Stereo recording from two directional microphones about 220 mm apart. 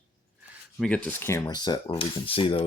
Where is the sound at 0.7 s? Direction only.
5° left (ahead or behind); by 2.6 s 25° left (ahead or behind).